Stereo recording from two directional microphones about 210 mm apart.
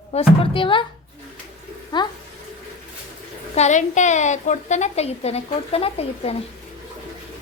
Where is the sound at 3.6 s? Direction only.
35° left (ahead or behind).